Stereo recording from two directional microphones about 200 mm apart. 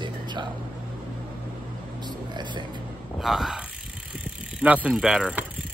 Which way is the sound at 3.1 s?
Centre (ahead or behind).